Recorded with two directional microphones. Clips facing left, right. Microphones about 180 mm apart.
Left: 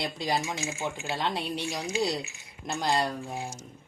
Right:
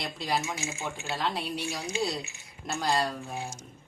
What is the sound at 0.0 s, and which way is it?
Speech, 25° left (ahead or behind).